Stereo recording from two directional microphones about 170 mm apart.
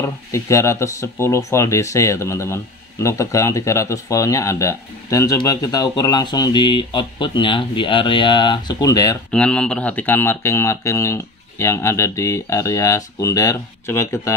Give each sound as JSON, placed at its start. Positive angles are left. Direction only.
{"t": 0.0, "sound": "speech", "side_deg": 15}
{"t": 9.3, "sound": "speech", "side_deg": 5}